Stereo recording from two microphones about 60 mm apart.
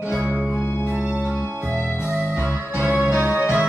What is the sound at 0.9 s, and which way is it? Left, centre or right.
Organ, right.